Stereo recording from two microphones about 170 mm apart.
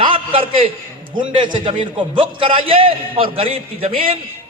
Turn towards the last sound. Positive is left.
turn(degrees=-35)  # may be behind; listen again after turning